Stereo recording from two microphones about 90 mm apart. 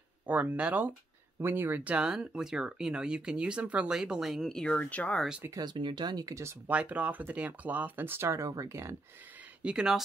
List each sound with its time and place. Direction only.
0.3 s speech: 15° right (ahead or behind)
2.0 s speech: 5° right (ahead or behind); by 5.2 s 15° left (ahead or behind)
5.5 s speech: 50° right (ahead or behind)
6.7 s speech: 15° right (ahead or behind); by 8.9 s 30° right (ahead or behind)
9.6 s speech: 10° right (ahead or behind)